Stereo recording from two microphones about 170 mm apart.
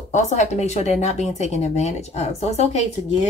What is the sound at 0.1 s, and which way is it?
Speech, 45° left (ahead or behind).